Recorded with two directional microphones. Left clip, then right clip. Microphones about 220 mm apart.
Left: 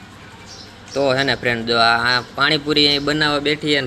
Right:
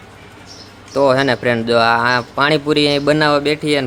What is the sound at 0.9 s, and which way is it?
Speech, 20° right (ahead or behind).